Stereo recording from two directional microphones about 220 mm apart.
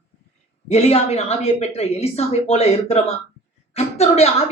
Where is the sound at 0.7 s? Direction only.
30° left (ahead or behind).